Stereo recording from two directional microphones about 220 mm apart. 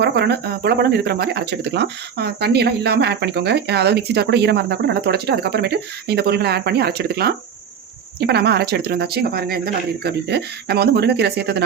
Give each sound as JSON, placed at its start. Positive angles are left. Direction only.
{"t": 0.0, "sound": "speech", "side_deg": -50}